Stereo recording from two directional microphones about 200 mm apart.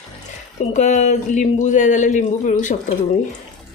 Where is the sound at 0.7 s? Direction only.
35° left (ahead or behind).